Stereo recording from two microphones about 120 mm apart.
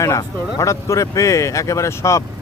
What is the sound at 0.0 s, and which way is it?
Speech, 25° left (ahead or behind).